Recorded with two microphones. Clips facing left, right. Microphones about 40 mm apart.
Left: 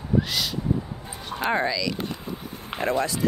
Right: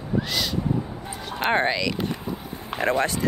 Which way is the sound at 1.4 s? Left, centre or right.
Right.